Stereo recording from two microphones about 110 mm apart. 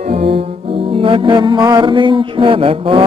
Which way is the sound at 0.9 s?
55° right (ahead or behind).